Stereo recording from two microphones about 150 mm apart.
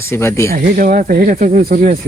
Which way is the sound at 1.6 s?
65° right (ahead or behind).